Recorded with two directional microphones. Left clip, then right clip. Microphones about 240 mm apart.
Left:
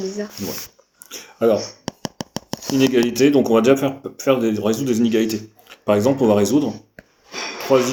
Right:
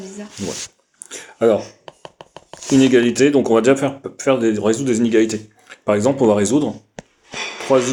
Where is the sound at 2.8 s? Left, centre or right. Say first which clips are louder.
Right 2 dB; right.